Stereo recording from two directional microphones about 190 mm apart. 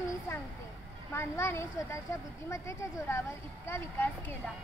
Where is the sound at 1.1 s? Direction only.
10° left (ahead or behind).